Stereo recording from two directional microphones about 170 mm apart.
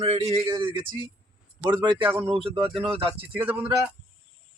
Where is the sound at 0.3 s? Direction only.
25° right (ahead or behind).